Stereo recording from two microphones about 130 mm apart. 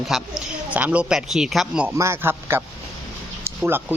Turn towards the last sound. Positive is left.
turn(degrees=-20)  # may be behind; listen again after turning